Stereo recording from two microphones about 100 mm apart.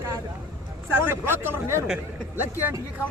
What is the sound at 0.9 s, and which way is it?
Speech, 20° right (ahead or behind).